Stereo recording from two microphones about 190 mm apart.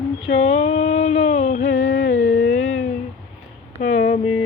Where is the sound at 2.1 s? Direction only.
70° left (ahead or behind).